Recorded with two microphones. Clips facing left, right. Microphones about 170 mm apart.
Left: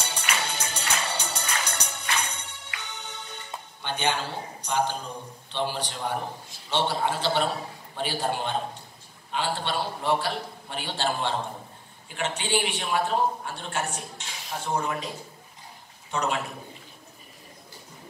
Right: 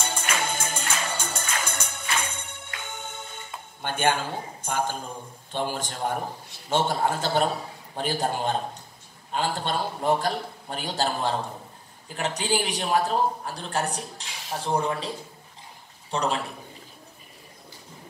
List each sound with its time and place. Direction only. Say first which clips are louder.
0.0 s music: right 2 dB; 50° right (ahead or behind)
5.5 s a man's voice: right 1 dB; 45° right (ahead or behind)